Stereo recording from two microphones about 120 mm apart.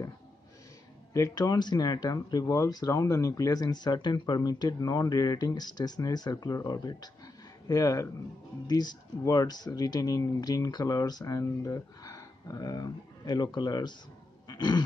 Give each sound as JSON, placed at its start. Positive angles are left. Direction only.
{"t": 1.1, "sound": "speech", "side_deg": 30}
{"t": 14.5, "sound": "roaring cats", "side_deg": 35}